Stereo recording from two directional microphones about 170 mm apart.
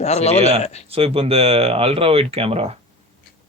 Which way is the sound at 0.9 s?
35° right (ahead or behind).